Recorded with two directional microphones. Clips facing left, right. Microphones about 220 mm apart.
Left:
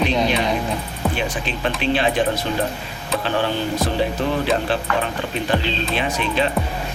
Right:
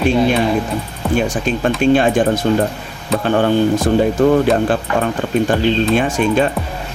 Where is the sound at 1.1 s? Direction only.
45° right (ahead or behind).